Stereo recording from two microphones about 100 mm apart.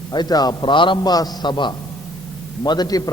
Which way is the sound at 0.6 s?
55° left (ahead or behind).